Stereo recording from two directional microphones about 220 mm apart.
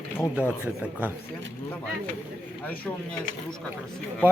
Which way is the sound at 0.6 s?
5° right (ahead or behind).